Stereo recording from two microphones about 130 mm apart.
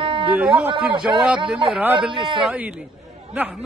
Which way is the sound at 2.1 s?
40° right (ahead or behind).